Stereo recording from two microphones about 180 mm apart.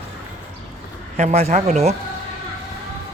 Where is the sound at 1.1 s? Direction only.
40° right (ahead or behind).